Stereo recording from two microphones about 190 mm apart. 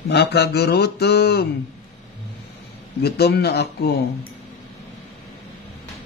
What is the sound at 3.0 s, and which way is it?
Speech, 55° left (ahead or behind).